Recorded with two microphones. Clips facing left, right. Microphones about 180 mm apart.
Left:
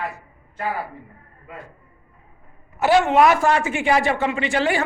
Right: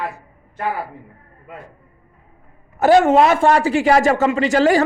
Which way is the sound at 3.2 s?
30° right (ahead or behind).